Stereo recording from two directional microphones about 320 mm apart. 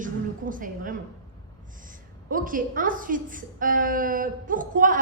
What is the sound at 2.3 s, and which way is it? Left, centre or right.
A woman's voice, right.